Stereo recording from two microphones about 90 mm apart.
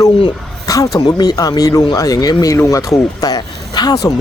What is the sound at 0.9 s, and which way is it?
A man's voice, 50° left (ahead or behind).